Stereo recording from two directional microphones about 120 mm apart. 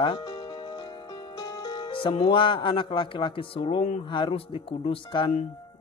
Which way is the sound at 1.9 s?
45° left (ahead or behind).